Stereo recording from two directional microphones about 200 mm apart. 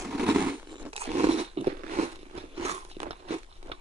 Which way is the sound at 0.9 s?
30° right (ahead or behind).